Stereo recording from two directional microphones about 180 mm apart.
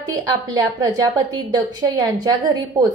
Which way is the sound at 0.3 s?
20° right (ahead or behind).